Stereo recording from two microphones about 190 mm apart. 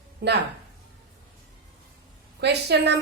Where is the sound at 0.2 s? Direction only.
55° right (ahead or behind).